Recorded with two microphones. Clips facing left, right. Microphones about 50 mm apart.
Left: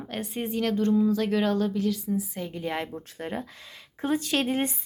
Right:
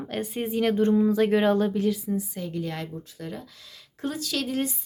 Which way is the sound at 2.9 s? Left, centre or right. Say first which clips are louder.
Left 3 dB; left.